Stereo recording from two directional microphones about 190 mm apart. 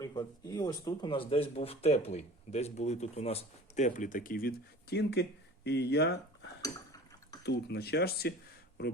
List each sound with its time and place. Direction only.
0.0 s speech: 20° left (ahead or behind)
1.3 s speech: 30° left (ahead or behind); by 6.1 s 60° left (ahead or behind)
6.6 s a sound: 20° left (ahead or behind)
7.4 s speech: 60° left (ahead or behind)